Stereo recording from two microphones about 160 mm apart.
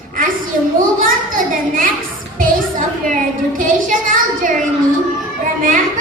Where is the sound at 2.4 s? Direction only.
55° right (ahead or behind).